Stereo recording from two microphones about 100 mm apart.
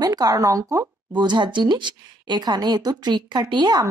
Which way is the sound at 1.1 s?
50° right (ahead or behind).